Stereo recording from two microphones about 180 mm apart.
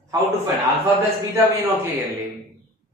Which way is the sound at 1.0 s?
15° right (ahead or behind).